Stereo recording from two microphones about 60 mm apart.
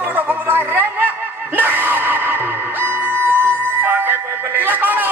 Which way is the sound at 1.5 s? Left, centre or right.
Right.